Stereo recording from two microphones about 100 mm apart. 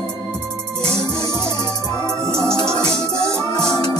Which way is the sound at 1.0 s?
45° left (ahead or behind).